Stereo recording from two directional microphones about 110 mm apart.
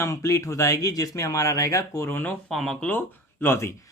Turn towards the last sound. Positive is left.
turn(degrees=20)  # may be behind; listen again after turning